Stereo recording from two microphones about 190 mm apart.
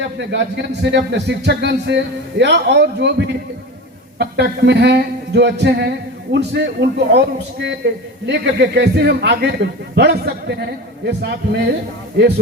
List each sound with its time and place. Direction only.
0.2 s a man's voice: 65° right (ahead or behind)
8.3 s a man's voice: 60° right (ahead or behind)